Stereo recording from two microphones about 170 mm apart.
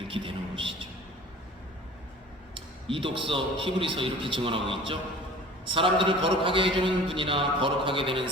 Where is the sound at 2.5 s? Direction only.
30° right (ahead or behind).